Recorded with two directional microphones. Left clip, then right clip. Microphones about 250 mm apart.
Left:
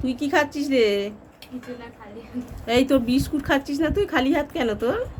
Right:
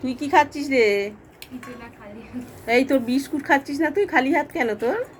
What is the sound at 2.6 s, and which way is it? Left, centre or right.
Speech, centre.